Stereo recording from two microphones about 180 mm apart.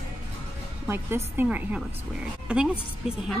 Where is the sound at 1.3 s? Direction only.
5° right (ahead or behind).